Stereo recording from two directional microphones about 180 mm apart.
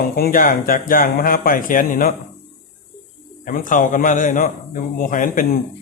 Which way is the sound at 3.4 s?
45° left (ahead or behind).